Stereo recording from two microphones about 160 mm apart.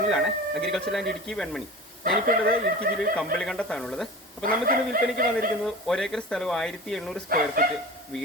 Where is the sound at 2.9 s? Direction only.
60° right (ahead or behind).